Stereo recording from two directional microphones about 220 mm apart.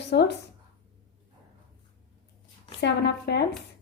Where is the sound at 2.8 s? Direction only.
50° left (ahead or behind).